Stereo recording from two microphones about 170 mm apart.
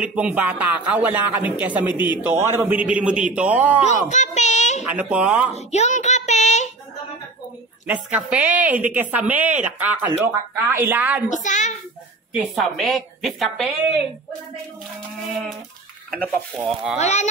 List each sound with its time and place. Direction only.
0.0 s speech: 5° right (ahead or behind)
3.8 s a child's voice: 40° left (ahead or behind)
4.8 s speech: 10° right (ahead or behind)
5.5 s a child's voice: 40° left (ahead or behind)
7.8 s speech: 10° right (ahead or behind)
11.2 s a child's voice: 45° left (ahead or behind)
12.5 s a woman's voice: centre (ahead or behind)
16.6 s a woman's voice: 5° right (ahead or behind)
17.0 s a child's voice: 40° left (ahead or behind)